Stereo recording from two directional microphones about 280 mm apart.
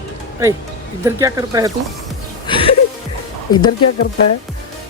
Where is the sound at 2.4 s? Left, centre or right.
Centre.